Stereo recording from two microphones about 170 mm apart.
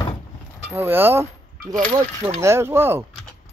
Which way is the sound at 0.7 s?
10° right (ahead or behind).